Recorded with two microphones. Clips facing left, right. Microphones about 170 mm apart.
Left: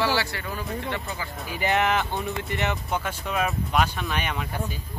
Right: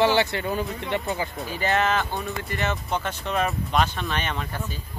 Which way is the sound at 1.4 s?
15° left (ahead or behind).